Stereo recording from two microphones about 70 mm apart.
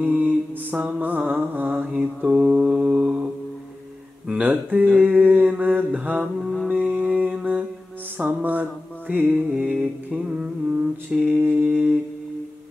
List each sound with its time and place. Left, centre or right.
0.0 s mantra: right
4.3 s mantra: centre